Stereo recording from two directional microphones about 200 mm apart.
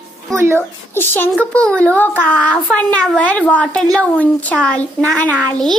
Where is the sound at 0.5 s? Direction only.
10° left (ahead or behind).